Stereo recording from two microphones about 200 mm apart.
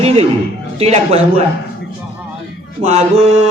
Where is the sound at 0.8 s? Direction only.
30° right (ahead or behind).